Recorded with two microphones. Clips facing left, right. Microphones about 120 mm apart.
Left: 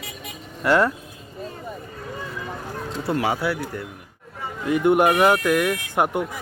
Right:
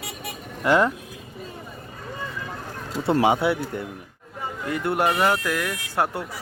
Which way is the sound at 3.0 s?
25° right (ahead or behind).